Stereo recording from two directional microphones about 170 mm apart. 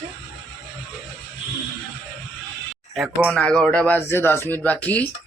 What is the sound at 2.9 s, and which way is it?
Speech, 5° right (ahead or behind).